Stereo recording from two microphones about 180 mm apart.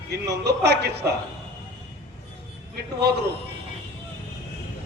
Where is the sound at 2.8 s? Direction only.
65° right (ahead or behind).